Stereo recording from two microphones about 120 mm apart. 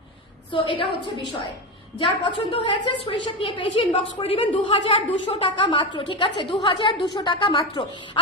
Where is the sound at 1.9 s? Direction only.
45° left (ahead or behind).